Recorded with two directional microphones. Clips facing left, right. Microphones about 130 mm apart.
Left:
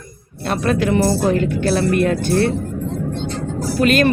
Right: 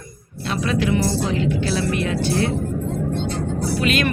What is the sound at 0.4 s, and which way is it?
Speech, 50° left (ahead or behind).